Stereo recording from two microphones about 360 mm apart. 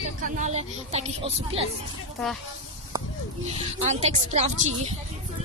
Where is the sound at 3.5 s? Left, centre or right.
Centre.